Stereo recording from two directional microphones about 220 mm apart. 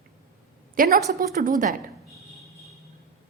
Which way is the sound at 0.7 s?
40° right (ahead or behind).